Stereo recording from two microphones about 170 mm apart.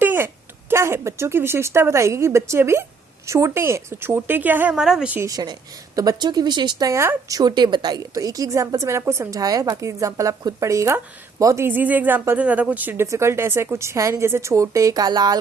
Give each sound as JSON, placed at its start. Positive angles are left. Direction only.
{"t": 0.0, "sound": "a sound", "side_deg": -10}
{"t": 0.7, "sound": "speech", "side_deg": -15}
{"t": 5.3, "sound": "speech", "side_deg": -25}